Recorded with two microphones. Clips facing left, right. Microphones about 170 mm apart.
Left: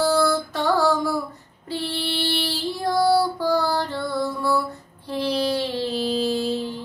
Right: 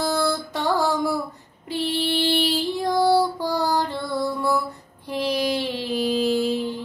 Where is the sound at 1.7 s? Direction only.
15° right (ahead or behind).